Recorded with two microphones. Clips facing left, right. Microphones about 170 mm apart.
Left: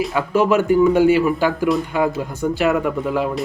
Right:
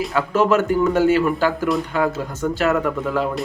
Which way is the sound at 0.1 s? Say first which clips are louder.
Right 1 dB; 15° left (ahead or behind).